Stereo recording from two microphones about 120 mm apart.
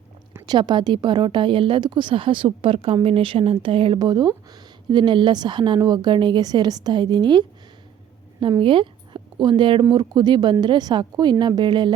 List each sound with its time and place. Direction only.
0.4 s speech: 35° right (ahead or behind)
8.6 s speech: 45° right (ahead or behind)